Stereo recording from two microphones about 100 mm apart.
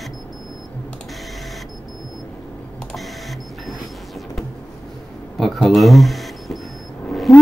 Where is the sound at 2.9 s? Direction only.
Centre (ahead or behind).